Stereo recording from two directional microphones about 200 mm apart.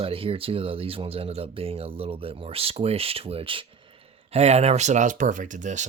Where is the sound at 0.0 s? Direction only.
30° right (ahead or behind).